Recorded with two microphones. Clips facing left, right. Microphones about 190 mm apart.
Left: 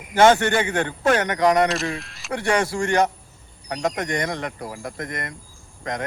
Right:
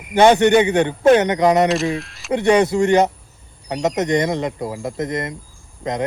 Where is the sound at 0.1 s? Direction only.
20° right (ahead or behind).